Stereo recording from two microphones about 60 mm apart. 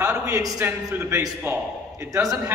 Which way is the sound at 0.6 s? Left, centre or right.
Right.